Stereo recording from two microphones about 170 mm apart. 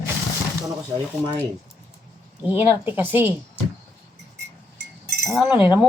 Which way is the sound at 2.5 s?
10° right (ahead or behind).